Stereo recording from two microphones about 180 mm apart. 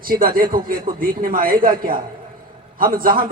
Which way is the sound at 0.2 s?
50° right (ahead or behind).